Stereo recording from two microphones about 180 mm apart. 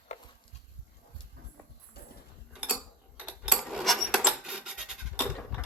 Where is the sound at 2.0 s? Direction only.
60° left (ahead or behind).